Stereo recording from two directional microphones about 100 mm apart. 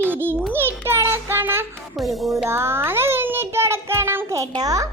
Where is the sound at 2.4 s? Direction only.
25° right (ahead or behind).